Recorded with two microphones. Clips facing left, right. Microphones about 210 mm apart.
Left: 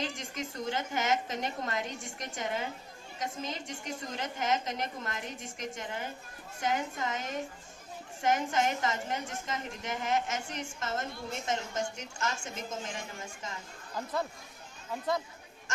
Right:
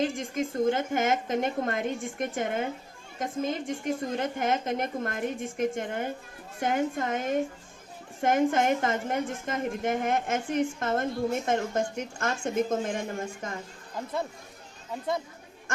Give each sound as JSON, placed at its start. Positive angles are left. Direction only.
{"t": 0.0, "sound": "a woman's voice", "side_deg": -50}